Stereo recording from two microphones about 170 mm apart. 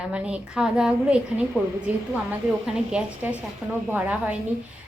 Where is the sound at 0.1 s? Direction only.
5° right (ahead or behind).